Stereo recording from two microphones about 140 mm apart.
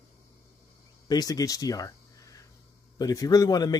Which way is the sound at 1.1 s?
25° left (ahead or behind).